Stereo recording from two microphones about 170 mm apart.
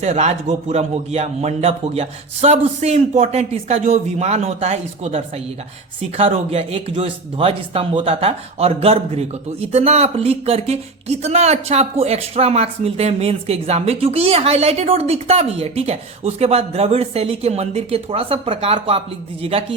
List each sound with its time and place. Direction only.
0.0 s speech: 40° right (ahead or behind)